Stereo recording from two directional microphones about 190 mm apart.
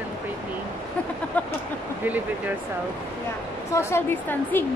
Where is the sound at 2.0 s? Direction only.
10° right (ahead or behind).